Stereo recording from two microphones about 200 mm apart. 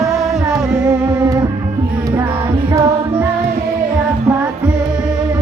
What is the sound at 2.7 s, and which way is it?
Music, 15° right (ahead or behind).